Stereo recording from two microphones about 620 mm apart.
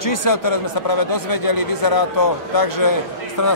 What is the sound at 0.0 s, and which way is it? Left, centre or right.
A man's voice, left.